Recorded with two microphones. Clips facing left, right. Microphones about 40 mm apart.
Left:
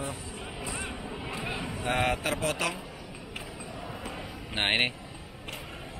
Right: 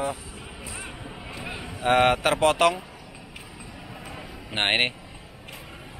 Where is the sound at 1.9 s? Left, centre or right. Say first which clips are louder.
Right 9 dB; right.